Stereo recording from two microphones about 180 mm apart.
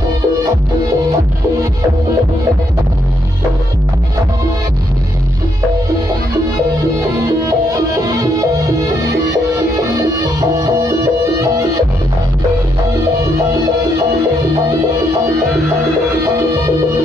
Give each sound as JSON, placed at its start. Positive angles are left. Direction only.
{"t": 7.9, "sound": "music", "side_deg": -20}
{"t": 10.6, "sound": "music", "side_deg": -20}